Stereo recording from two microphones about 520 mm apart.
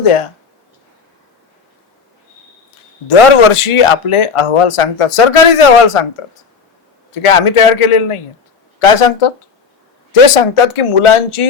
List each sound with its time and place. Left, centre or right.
0.0 s speech: left
3.1 s speech: left
7.1 s speech: left